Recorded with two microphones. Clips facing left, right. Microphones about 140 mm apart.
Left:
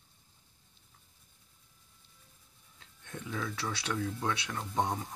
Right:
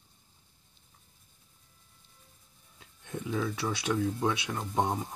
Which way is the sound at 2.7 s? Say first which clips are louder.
Right 6 dB; 15° right (ahead or behind).